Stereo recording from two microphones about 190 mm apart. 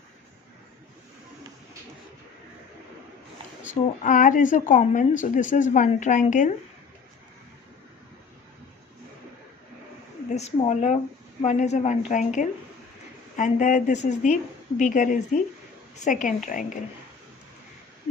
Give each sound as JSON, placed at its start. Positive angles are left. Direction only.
{"t": 4.0, "sound": "speech", "side_deg": 45}
{"t": 10.2, "sound": "speech", "side_deg": 35}